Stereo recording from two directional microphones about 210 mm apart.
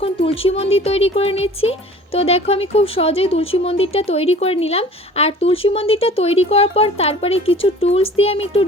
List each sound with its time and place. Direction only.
0.0 s speech: 25° left (ahead or behind)